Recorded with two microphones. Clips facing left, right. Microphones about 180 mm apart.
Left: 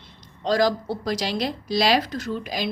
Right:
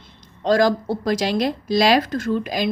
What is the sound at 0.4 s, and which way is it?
A woman's voice, 50° right (ahead or behind).